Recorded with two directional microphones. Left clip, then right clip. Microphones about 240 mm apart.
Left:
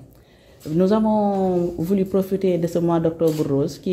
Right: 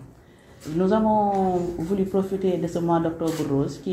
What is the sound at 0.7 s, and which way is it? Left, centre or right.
Speech, left.